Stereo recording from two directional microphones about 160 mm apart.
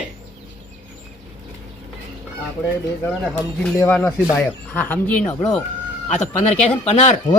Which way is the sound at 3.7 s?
15° left (ahead or behind).